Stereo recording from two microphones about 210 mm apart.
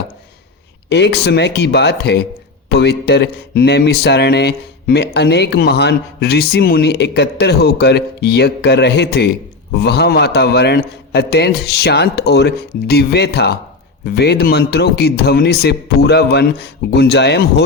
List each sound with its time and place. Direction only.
0.9 s speech: 55° left (ahead or behind)